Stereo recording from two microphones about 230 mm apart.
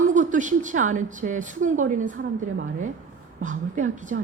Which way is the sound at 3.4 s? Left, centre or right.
Right.